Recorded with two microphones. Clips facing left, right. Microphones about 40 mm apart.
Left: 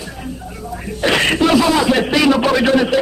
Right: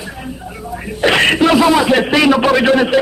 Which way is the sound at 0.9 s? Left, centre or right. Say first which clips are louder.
Right 3 dB; right.